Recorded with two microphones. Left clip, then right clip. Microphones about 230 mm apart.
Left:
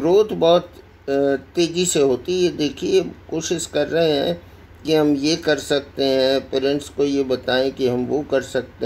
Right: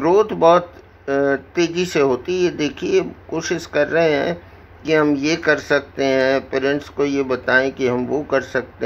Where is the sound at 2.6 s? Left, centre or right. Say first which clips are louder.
Even; right.